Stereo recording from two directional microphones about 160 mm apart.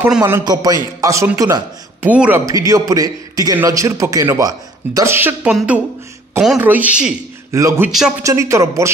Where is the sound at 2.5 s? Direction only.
20° right (ahead or behind).